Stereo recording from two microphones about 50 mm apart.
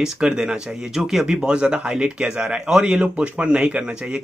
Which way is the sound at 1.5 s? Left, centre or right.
Right.